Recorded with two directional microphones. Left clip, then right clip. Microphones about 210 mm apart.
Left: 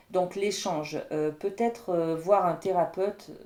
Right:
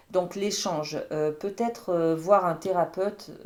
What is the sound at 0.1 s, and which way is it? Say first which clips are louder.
Speech: even; 30° right (ahead or behind).